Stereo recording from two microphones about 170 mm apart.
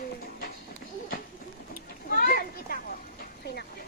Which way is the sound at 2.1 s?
60° left (ahead or behind).